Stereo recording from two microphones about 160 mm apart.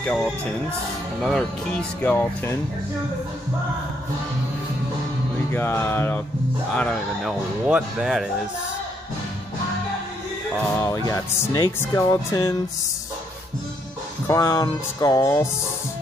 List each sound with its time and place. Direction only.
0.0 s speech: 5° left (ahead or behind)
5.5 s speech: 15° left (ahead or behind); by 8.3 s 5° right (ahead or behind)
10.6 s speech: 20° left (ahead or behind)
14.2 s speech: 20° left (ahead or behind)